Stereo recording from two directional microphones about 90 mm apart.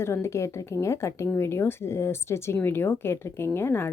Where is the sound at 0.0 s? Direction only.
30° left (ahead or behind).